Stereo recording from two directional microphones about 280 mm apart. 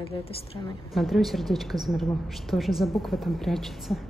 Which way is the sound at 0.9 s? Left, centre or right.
Centre.